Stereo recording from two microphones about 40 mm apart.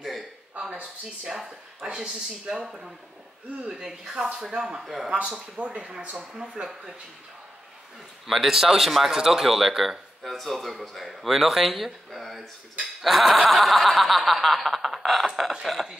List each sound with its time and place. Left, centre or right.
1.2 s speech: centre
4.5 s speech: centre
4.8 s snicker: centre
5.6 s speech: right
8.3 s speech: centre
10.2 s snicker: centre